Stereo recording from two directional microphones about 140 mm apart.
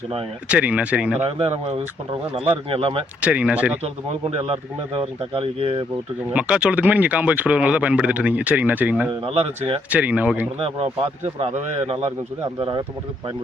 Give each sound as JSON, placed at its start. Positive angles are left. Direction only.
{"t": 0.4, "sound": "speech", "side_deg": -10}
{"t": 1.2, "sound": "a man's voice", "side_deg": -45}
{"t": 3.2, "sound": "speech", "side_deg": -10}
{"t": 4.1, "sound": "a man's voice", "side_deg": -50}
{"t": 6.3, "sound": "speech", "side_deg": -10}
{"t": 9.2, "sound": "a man's voice", "side_deg": -45}
{"t": 9.9, "sound": "speech", "side_deg": -10}
{"t": 10.6, "sound": "a man's voice", "side_deg": -45}
{"t": 12.5, "sound": "speech", "side_deg": -35}